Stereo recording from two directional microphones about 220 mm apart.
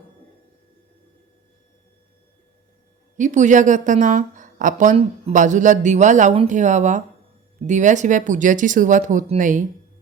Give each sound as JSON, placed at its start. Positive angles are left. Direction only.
{"t": 3.2, "sound": "a woman's voice", "side_deg": -35}